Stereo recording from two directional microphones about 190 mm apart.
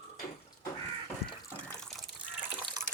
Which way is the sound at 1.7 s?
5° left (ahead or behind).